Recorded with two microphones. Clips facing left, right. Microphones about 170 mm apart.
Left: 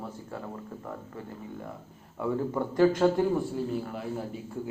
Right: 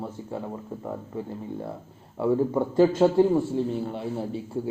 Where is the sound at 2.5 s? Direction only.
15° right (ahead or behind).